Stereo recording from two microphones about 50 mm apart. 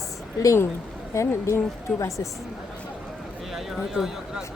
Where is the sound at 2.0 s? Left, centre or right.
Left.